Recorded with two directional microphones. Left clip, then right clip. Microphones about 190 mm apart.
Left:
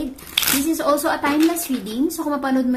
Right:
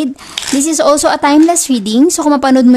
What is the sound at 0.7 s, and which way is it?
Speech, 50° right (ahead or behind).